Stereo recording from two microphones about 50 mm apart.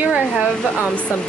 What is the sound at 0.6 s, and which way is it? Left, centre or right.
Speech, left.